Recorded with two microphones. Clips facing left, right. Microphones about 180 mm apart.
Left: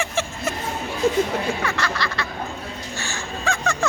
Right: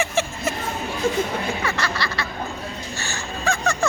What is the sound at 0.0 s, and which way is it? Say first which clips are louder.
Music: right 2 dB; 5° right (ahead or behind).